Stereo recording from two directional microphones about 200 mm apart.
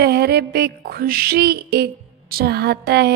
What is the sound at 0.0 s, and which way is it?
Speech, 55° right (ahead or behind).